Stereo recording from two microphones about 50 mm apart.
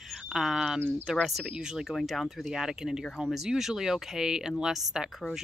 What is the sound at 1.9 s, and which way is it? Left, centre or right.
Speech, centre.